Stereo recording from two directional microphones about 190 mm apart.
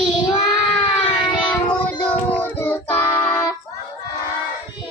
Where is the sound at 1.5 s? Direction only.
10° left (ahead or behind).